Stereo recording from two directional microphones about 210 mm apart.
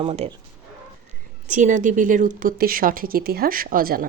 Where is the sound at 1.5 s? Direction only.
35° right (ahead or behind).